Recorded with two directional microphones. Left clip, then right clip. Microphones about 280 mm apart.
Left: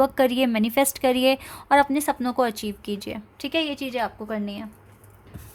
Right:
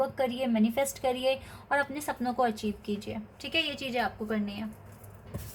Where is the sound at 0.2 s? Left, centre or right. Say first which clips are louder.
Left 8 dB; left.